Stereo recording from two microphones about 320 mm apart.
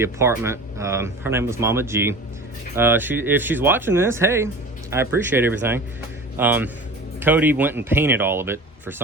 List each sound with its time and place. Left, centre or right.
0.0 s speech: centre